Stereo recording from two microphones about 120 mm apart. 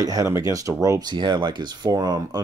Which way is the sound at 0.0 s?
30° right (ahead or behind).